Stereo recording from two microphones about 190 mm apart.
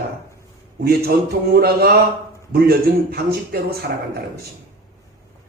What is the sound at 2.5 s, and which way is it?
A man's voice, 55° right (ahead or behind).